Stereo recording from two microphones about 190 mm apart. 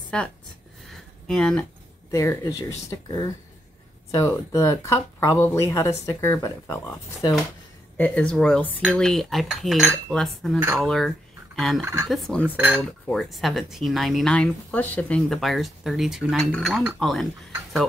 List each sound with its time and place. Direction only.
0.1 s speech: 5° left (ahead or behind)
8.0 s speech: 5° left (ahead or behind)
11.8 s speech: 15° right (ahead or behind)
12.1 s speech: centre (ahead or behind)
12.4 s speech: 10° right (ahead or behind)